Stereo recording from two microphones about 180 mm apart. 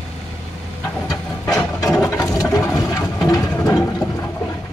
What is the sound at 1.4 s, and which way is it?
Ratchet, 20° left (ahead or behind).